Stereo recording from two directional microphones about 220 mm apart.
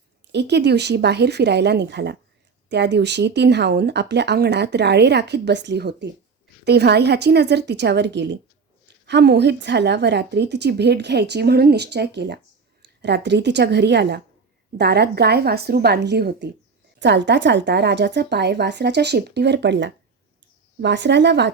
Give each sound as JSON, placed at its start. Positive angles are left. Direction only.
{"t": 0.3, "sound": "speech", "side_deg": -50}